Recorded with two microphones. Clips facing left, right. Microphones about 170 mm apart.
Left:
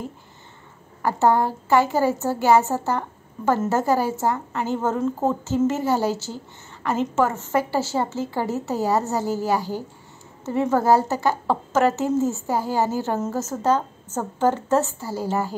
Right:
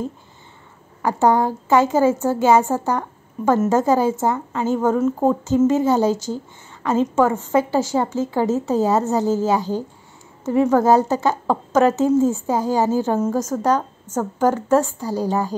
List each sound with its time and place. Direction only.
1.0 s speech: 15° right (ahead or behind)